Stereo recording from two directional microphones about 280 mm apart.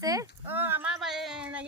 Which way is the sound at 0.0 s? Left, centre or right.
Centre.